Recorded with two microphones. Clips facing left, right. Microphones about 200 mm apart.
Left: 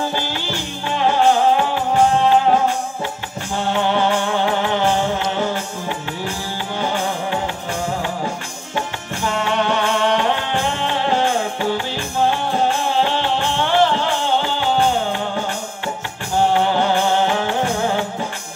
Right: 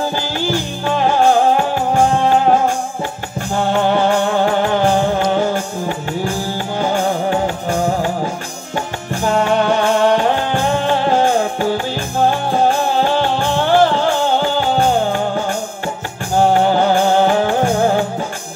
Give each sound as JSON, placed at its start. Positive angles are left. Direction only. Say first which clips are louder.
{"t": 0.1, "sound": "music", "louder": "right 5 dB", "side_deg": -45}
{"t": 3.7, "sound": "music", "louder": "right 3 dB", "side_deg": -45}
{"t": 16.5, "sound": "music", "louder": "right 4 dB", "side_deg": -45}